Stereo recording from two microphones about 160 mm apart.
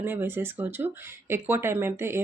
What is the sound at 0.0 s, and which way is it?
Speech, 15° right (ahead or behind).